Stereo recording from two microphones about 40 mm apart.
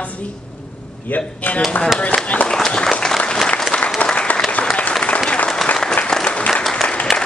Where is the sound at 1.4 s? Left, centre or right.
Left.